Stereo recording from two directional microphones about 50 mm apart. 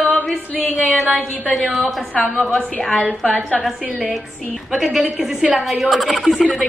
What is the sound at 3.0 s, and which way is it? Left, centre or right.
Speech, left.